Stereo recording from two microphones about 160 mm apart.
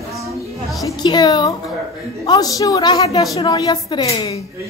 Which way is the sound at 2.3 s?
20° left (ahead or behind).